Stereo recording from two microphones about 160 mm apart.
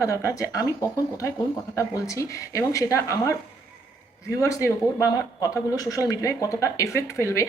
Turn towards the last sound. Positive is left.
turn(degrees=20)  # may be behind; listen again after turning